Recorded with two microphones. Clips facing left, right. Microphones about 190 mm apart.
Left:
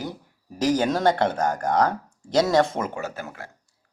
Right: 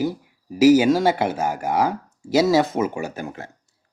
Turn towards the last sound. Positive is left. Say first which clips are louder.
# right 3 dB
turn(degrees=-20)  # may be behind; listen again after turning